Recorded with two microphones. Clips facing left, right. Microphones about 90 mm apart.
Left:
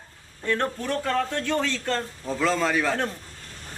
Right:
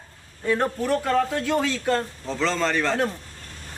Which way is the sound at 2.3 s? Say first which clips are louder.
Left 1 dB; 10° left (ahead or behind).